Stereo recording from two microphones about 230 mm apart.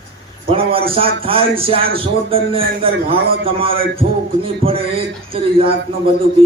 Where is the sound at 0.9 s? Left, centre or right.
Right.